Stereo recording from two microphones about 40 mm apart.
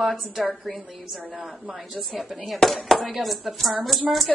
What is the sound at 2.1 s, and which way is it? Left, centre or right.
Speech, centre.